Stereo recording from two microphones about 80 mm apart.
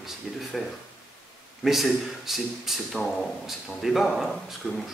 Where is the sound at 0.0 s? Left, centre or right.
Centre.